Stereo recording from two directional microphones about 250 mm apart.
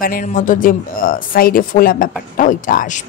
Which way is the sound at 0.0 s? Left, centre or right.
Left.